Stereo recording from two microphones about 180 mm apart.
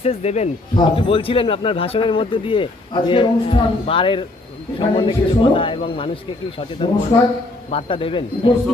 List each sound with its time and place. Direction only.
0.0 s speech: 35° left (ahead or behind)